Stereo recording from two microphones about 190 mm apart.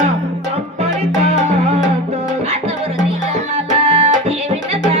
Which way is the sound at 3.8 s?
30° right (ahead or behind).